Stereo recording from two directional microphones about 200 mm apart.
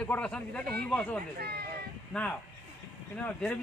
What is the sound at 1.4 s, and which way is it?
Speech, 50° right (ahead or behind).